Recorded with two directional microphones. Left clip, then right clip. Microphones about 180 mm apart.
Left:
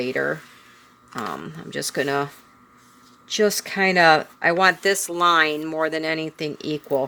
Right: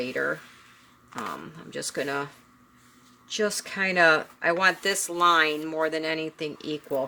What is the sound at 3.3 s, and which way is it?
Speech, 30° left (ahead or behind).